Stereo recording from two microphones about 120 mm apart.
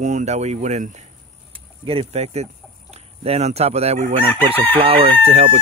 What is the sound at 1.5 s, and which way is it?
Speech, 55° right (ahead or behind).